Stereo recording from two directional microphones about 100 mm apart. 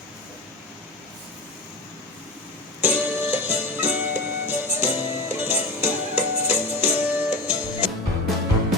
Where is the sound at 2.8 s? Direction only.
15° right (ahead or behind).